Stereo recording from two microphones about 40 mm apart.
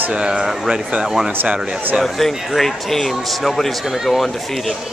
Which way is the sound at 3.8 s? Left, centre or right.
Centre.